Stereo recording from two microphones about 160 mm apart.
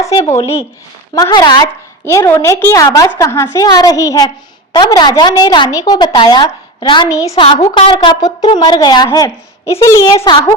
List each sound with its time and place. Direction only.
0.0 s a sound: 20° left (ahead or behind)
1.1 s a woman's voice: 20° left (ahead or behind)
7.7 s a woman's voice: 35° left (ahead or behind); by 10.2 s 20° left (ahead or behind)